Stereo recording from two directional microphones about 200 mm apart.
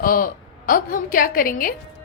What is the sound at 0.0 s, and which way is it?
A woman's voice, 45° left (ahead or behind).